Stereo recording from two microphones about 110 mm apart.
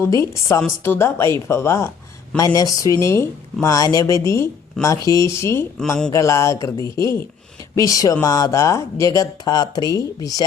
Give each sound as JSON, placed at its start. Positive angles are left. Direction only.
{"t": 0.0, "sound": "speech", "side_deg": 30}